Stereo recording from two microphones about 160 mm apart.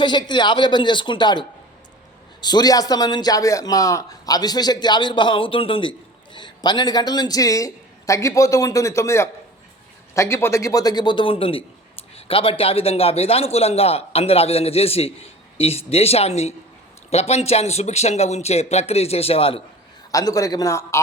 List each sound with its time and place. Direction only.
0.0 s a man's voice: 30° left (ahead or behind)
20.1 s a man's voice: 20° left (ahead or behind)